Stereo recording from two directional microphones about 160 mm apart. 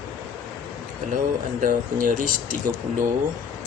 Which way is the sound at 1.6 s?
55° right (ahead or behind).